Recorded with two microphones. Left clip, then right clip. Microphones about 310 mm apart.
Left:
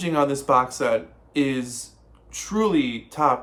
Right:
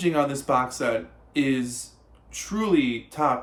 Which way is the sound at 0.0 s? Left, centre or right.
Centre.